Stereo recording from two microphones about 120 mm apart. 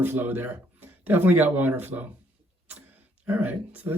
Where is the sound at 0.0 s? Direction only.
15° right (ahead or behind).